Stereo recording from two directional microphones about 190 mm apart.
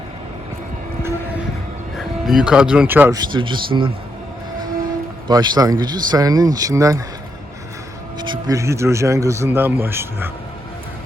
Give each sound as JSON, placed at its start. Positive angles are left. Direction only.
{"t": 2.0, "sound": "speech", "side_deg": 0}
{"t": 5.3, "sound": "speech", "side_deg": -20}
{"t": 8.2, "sound": "speech", "side_deg": -20}